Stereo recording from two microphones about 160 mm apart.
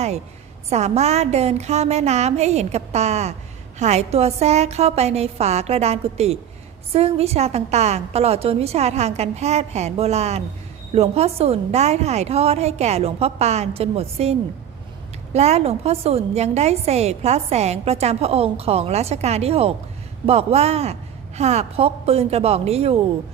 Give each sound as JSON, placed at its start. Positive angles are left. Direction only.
{"t": 0.7, "sound": "a woman's voice", "side_deg": -45}